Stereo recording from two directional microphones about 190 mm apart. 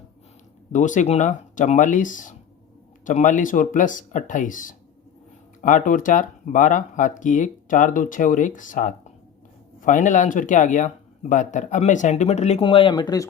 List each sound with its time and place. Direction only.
0.7 s speech: 40° left (ahead or behind); by 13.2 s 20° left (ahead or behind)